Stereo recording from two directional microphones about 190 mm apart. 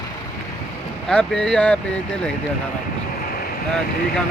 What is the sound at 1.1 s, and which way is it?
Speech, 5° left (ahead or behind).